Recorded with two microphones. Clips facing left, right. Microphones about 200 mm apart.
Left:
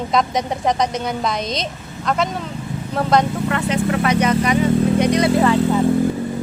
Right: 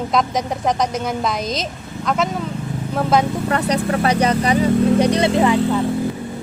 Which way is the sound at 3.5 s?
40° right (ahead or behind).